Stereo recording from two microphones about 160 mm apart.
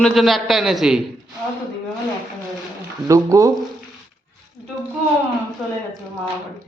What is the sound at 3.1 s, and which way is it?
Speech, 20° right (ahead or behind).